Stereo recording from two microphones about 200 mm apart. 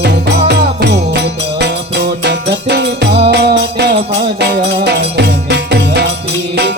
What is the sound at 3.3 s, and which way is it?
Music, 55° right (ahead or behind).